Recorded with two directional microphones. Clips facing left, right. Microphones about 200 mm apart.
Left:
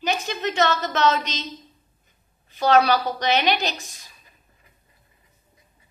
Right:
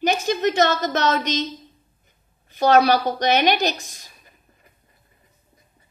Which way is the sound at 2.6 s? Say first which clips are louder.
Right 2 dB; 45° right (ahead or behind).